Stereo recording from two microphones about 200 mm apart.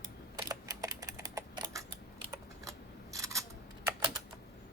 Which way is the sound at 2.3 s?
15° right (ahead or behind).